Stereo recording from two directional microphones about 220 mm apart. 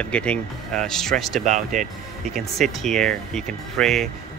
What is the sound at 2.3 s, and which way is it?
Speech, centre (ahead or behind).